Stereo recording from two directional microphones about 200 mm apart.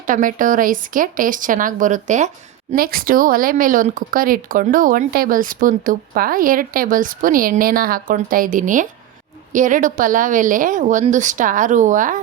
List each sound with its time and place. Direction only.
0.1 s a woman's voice: 40° right (ahead or behind)